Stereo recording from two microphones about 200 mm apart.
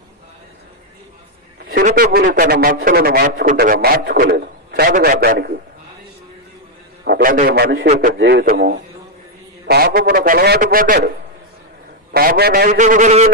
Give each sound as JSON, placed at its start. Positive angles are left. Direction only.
{"t": 1.7, "sound": "speech", "side_deg": -45}
{"t": 7.1, "sound": "a man's voice", "side_deg": -45}
{"t": 8.2, "sound": "speech", "side_deg": -55}
{"t": 12.7, "sound": "a man's voice", "side_deg": -40}